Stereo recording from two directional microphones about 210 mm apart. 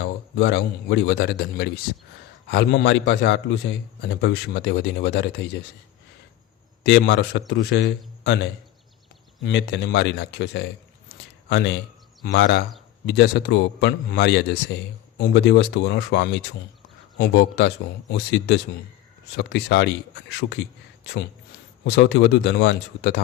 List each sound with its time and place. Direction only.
0.0 s a man's voice: 55° left (ahead or behind)
6.8 s a man's voice: 55° left (ahead or behind)
9.4 s a man's voice: 55° left (ahead or behind)
21.8 s speech: 55° left (ahead or behind)